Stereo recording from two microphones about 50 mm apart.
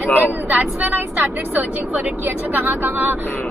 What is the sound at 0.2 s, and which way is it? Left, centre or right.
Vehicle, right.